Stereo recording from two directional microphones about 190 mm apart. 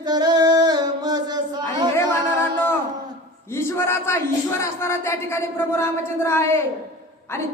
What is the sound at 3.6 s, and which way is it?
A man's voice, 10° left (ahead or behind).